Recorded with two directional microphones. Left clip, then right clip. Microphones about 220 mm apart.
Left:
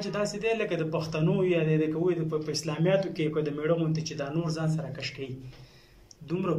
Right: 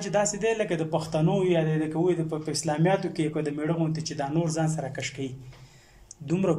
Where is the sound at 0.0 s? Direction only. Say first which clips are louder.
Right 4 dB; 35° right (ahead or behind).